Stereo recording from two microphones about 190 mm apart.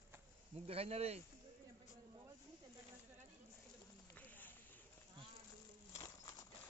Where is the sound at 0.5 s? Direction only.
30° right (ahead or behind).